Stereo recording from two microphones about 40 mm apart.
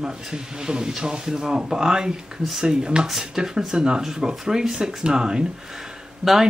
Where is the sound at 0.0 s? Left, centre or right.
Centre.